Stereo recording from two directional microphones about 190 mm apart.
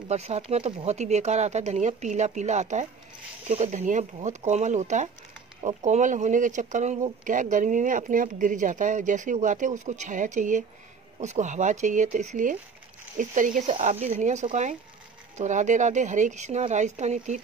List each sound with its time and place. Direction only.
0.1 s speech: 35° right (ahead or behind)